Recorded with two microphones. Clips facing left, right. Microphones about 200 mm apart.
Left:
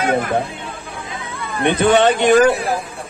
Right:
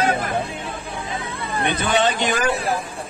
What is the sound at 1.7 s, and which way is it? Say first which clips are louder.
Speech: left 8 dB; 60° left (ahead or behind).